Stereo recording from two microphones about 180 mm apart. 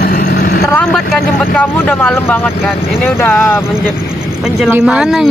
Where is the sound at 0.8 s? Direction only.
5° left (ahead or behind).